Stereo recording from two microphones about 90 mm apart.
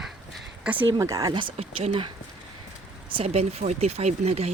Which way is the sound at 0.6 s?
15° right (ahead or behind).